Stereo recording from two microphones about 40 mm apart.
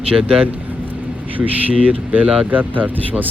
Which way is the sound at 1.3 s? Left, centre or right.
Right.